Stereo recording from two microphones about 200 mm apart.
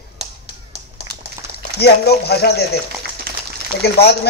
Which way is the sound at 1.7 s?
55° left (ahead or behind).